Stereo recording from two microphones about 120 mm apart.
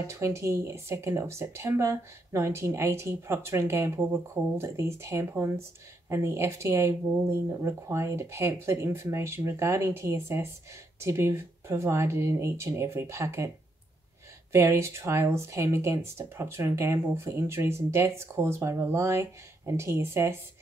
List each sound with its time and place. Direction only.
0.0 s speech: 25° right (ahead or behind)
14.5 s speech: 25° right (ahead or behind)